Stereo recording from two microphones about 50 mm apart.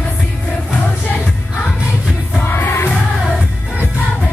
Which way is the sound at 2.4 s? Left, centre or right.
Left.